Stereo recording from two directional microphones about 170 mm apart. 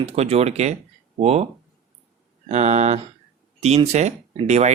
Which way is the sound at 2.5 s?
40° right (ahead or behind).